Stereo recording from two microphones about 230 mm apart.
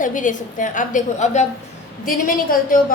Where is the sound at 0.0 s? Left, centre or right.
Left.